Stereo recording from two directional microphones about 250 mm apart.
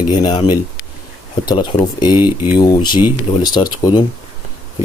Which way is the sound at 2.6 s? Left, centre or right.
Centre.